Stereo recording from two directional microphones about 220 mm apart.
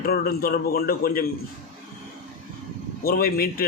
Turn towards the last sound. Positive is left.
turn(degrees=40)  # may be behind; listen again after turning